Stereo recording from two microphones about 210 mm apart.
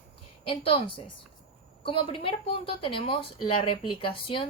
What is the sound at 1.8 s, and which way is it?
Speech, 25° left (ahead or behind).